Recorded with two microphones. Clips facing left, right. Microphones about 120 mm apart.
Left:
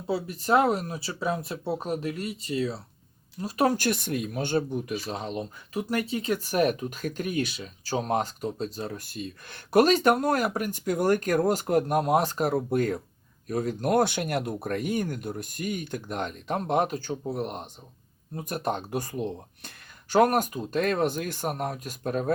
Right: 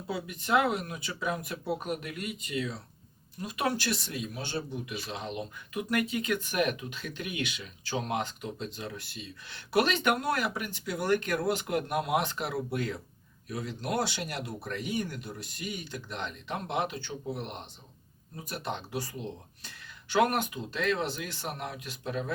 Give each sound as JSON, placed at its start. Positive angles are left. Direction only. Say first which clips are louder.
{"t": 0.1, "sound": "speech", "louder": "left 5 dB", "side_deg": 35}
{"t": 20.1, "sound": "speech", "louder": "left 5 dB", "side_deg": 40}